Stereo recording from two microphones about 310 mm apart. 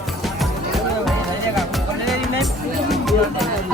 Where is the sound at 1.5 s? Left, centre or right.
Centre.